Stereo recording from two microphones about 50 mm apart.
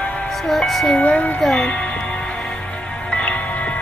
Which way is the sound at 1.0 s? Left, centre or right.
Left.